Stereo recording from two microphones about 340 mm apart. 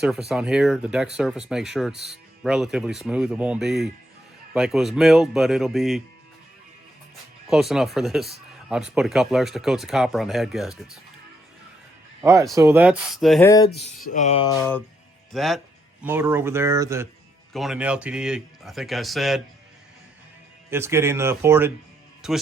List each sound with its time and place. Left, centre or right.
0.0 s speech: centre
7.4 s speech: centre
12.2 s speech: centre
13.7 s a sound: left
14.1 s music: centre
15.3 s speech: centre
20.7 s speech: centre